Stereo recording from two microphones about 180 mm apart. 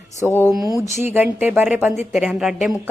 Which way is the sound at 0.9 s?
40° left (ahead or behind).